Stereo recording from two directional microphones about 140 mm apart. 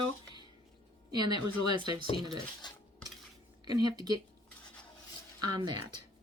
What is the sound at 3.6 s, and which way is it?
Speech, 30° right (ahead or behind).